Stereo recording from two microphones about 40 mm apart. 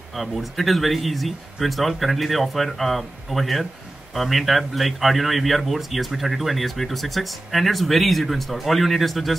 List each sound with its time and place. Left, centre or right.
0.1 s a man's voice: centre